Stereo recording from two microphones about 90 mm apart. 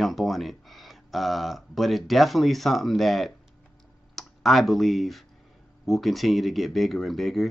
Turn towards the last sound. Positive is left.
turn(degrees=0)  # may be behind; listen again after turning